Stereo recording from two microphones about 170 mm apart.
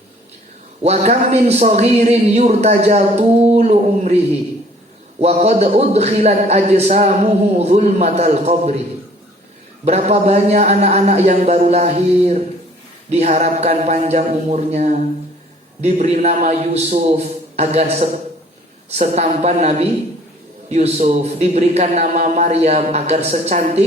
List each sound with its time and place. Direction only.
0.8 s speech: 40° right (ahead or behind)
5.2 s speech: 40° right (ahead or behind)
9.8 s speech: 40° right (ahead or behind)